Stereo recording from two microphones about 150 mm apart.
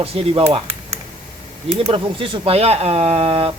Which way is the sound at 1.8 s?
35° right (ahead or behind).